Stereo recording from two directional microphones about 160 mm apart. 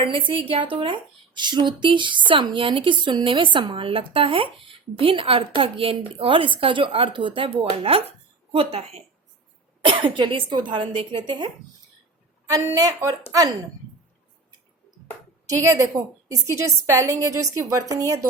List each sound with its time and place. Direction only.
0.0 s speech: 35° right (ahead or behind)
12.5 s a woman's voice: 20° right (ahead or behind)
15.4 s a woman's voice: 20° right (ahead or behind)